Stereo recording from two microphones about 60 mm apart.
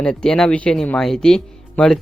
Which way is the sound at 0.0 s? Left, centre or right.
Centre.